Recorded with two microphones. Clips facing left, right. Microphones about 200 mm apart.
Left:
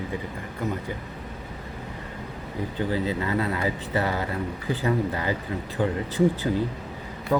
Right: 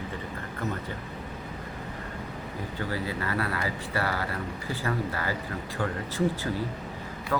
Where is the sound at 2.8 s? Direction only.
20° left (ahead or behind).